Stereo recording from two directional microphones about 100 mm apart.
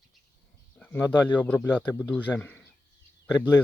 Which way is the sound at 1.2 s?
15° left (ahead or behind).